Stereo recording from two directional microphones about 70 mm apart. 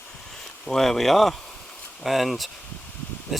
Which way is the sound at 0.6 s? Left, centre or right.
Centre.